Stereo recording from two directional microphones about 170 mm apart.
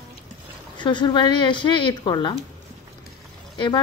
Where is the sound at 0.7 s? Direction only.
25° left (ahead or behind).